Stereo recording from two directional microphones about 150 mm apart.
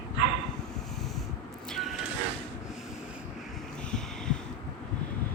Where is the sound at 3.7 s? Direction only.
5° left (ahead or behind).